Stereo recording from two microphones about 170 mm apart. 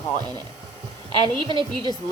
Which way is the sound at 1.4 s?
30° right (ahead or behind).